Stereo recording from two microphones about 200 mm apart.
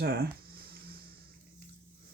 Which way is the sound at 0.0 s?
50° right (ahead or behind).